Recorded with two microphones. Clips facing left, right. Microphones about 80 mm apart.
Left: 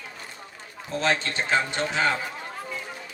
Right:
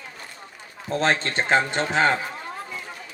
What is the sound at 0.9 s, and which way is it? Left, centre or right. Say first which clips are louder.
Speech: right 3 dB; right.